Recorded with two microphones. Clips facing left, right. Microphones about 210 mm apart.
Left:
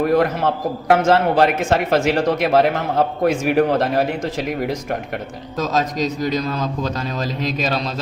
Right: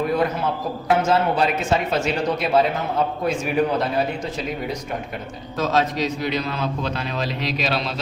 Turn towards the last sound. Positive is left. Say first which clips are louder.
# left 2 dB
turn(degrees=45)  # may be behind; listen again after turning